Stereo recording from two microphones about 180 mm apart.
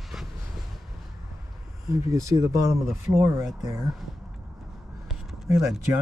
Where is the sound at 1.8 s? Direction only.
15° right (ahead or behind).